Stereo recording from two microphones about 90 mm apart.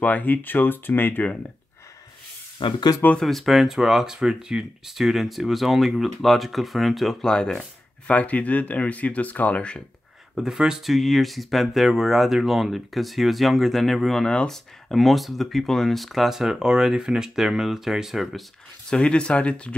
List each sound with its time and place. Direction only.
0.0 s speech: 20° left (ahead or behind)
2.6 s speech: 65° left (ahead or behind)
3.2 s speech: centre (ahead or behind)
10.3 s speech: 5° right (ahead or behind)
18.9 s speech: 10° left (ahead or behind)